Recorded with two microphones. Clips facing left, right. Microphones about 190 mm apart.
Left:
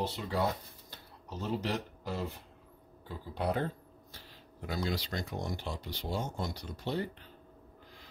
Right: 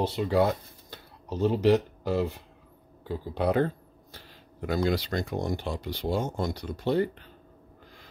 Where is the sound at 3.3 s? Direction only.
75° right (ahead or behind).